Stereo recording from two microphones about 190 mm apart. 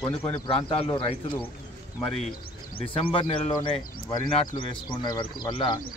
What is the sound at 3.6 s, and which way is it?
Speech, 20° left (ahead or behind).